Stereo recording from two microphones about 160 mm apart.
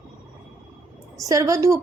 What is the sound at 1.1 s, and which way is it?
Speech, 20° right (ahead or behind).